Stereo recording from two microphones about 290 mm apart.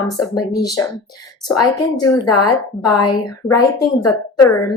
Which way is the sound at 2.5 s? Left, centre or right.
Centre.